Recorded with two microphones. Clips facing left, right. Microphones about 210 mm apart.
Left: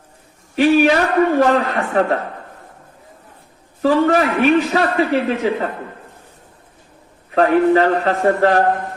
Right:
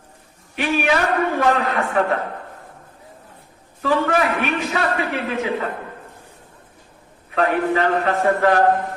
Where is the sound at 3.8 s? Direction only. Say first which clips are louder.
Left 5 dB; 40° left (ahead or behind).